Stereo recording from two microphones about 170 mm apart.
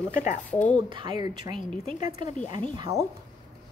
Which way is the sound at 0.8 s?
25° right (ahead or behind).